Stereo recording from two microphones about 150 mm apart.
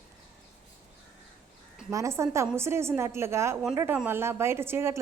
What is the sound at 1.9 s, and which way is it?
A woman's voice, 20° right (ahead or behind).